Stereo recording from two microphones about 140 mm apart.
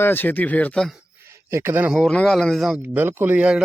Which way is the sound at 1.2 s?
20° right (ahead or behind).